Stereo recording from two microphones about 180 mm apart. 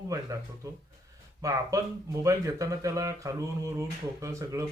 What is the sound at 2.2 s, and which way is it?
Speech, 15° right (ahead or behind).